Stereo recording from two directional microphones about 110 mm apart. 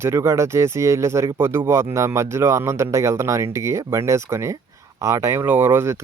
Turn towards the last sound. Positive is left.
turn(degrees=-25)  # may be behind; listen again after turning